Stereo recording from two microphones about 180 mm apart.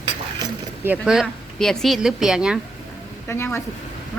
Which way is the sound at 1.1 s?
Centre (ahead or behind).